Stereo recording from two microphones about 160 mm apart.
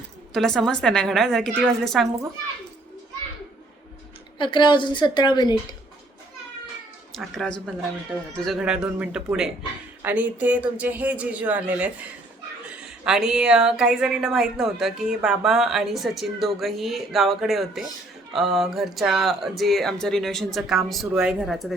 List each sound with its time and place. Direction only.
0.3 s a woman's voice: centre (ahead or behind)
4.4 s a woman's voice: 30° left (ahead or behind)
7.1 s a woman's voice: centre (ahead or behind)